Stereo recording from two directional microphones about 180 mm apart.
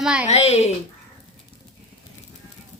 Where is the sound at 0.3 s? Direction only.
35° left (ahead or behind).